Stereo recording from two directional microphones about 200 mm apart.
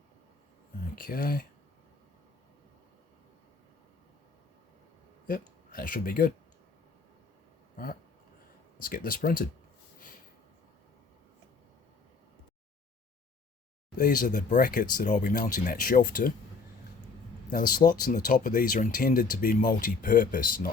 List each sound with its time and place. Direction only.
0.9 s speech: 45° left (ahead or behind)
5.3 s speech: 45° left (ahead or behind)
8.8 s speech: 45° left (ahead or behind)
14.0 s speech: 40° left (ahead or behind)
17.7 s speech: 45° left (ahead or behind)